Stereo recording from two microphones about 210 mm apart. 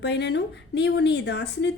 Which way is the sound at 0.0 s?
55° left (ahead or behind).